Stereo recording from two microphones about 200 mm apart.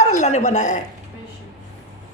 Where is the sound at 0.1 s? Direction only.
35° left (ahead or behind).